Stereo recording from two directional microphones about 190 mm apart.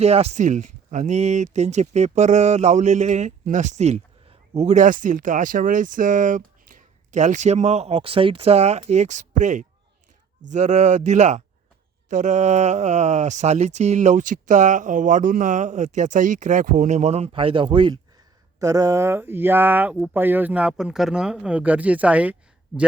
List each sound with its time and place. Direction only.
0.0 s speech: 35° right (ahead or behind); by 22.4 s 5° right (ahead or behind)